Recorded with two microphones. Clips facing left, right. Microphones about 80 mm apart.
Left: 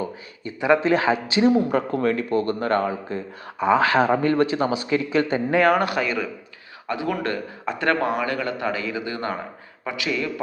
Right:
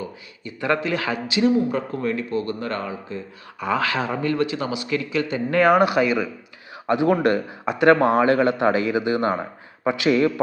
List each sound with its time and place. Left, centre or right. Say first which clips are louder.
0.8 s speech: left 5 dB; left
1.7 s speech: left 3 dB; left
3.6 s speech: left 5 dB; left
3.8 s speech: left 5 dB; left
5.5 s speech: right 3 dB; centre
6.8 s speech: right 7 dB; right
7.6 s speech: right 6 dB; centre; by 10.4 s right